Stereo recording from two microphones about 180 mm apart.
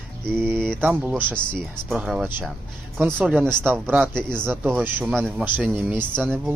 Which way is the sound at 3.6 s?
10° right (ahead or behind).